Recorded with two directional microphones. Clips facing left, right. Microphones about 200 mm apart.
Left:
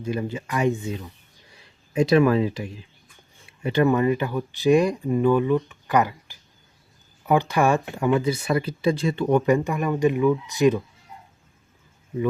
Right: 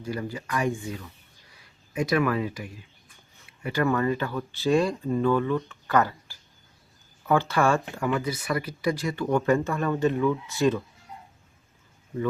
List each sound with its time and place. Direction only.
0.0 s speech: 20° left (ahead or behind)